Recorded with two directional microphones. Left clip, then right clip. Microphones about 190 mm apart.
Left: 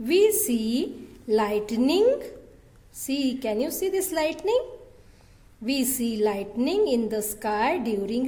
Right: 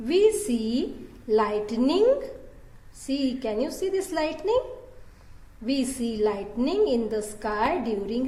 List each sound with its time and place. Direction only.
0.0 s a woman's voice: 55° left (ahead or behind)
5.6 s a woman's voice: 55° left (ahead or behind)